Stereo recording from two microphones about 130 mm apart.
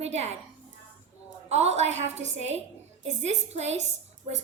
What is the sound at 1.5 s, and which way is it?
A woman's voice, 60° right (ahead or behind).